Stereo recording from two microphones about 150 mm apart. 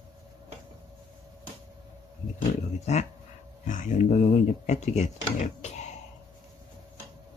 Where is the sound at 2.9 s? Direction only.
50° left (ahead or behind).